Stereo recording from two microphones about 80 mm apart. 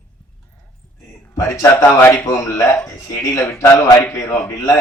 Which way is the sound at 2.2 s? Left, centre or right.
Left.